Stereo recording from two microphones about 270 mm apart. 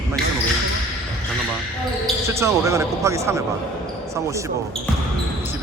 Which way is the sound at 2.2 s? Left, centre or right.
Centre.